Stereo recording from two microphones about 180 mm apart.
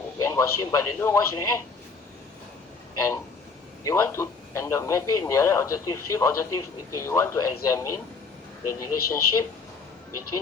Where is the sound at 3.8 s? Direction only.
15° left (ahead or behind).